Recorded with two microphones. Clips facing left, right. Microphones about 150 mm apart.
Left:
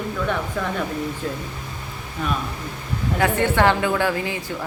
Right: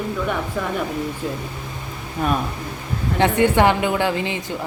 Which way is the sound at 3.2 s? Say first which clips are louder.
Right 3 dB; 15° right (ahead or behind).